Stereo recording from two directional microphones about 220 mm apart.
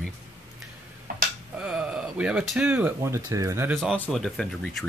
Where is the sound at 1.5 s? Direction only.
5° right (ahead or behind).